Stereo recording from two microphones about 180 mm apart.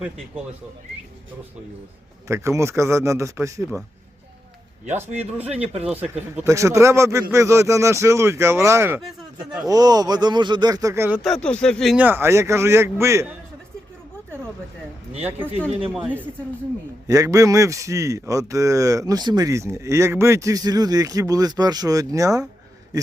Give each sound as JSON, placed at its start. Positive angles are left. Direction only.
{"t": 2.2, "sound": "a man's voice", "side_deg": -15}
{"t": 5.1, "sound": "speech", "side_deg": -35}
{"t": 5.8, "sound": "a man's voice", "side_deg": -10}
{"t": 11.2, "sound": "a man's voice", "side_deg": 5}
{"t": 15.2, "sound": "a man's voice", "side_deg": -10}